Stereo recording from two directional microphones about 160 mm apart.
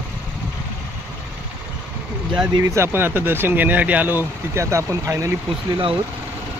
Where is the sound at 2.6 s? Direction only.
20° right (ahead or behind).